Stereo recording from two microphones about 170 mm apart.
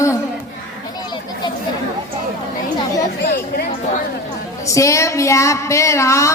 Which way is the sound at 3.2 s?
70° left (ahead or behind).